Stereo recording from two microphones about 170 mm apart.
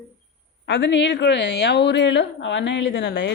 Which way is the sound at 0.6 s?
90° left.